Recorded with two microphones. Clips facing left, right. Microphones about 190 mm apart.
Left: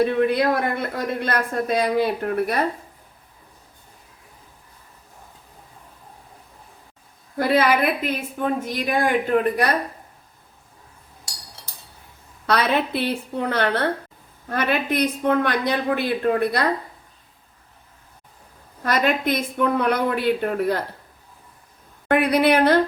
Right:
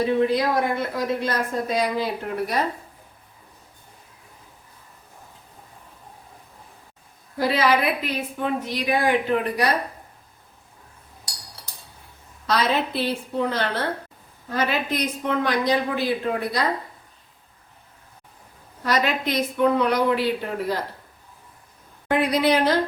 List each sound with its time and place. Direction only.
0.0 s speech: 60° left (ahead or behind)
7.3 s a woman's voice: 55° left (ahead or behind)
12.5 s speech: 60° left (ahead or behind)
18.8 s a woman's voice: 50° left (ahead or behind)
22.1 s speech: 60° left (ahead or behind)